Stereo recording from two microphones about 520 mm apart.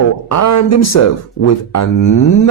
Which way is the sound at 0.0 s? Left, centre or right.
Left.